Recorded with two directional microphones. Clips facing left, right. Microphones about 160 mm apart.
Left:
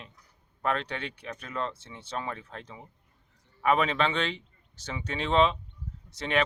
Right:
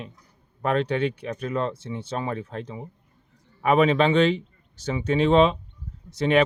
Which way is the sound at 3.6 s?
10° right (ahead or behind).